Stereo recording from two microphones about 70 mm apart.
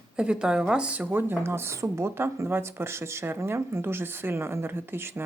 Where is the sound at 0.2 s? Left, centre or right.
Centre.